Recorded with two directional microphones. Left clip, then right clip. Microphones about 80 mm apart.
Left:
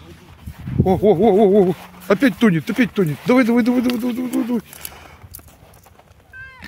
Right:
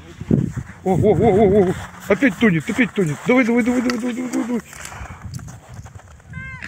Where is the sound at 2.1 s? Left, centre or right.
Left.